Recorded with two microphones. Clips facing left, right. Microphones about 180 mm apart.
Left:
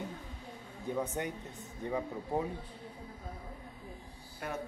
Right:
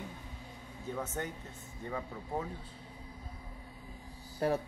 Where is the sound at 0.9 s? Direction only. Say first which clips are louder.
Left 3 dB; 15° left (ahead or behind).